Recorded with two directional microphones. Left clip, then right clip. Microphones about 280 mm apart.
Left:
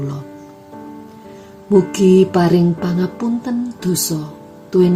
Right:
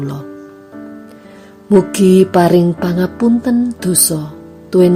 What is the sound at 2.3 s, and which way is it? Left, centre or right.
Speech, right.